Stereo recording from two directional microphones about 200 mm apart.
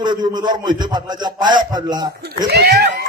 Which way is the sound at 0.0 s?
20° right (ahead or behind).